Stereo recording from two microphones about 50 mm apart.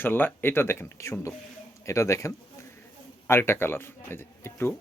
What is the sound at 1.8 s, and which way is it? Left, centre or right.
Speech, left.